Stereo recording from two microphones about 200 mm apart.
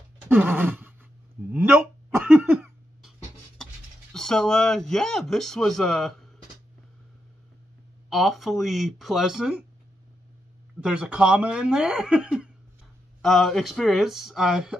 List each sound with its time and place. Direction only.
0.3 s groan: 10° right (ahead or behind)
1.5 s hiccup: 10° right (ahead or behind)
4.1 s speech: 5° left (ahead or behind)
8.1 s speech: centre (ahead or behind)
10.8 s speech: 5° right (ahead or behind)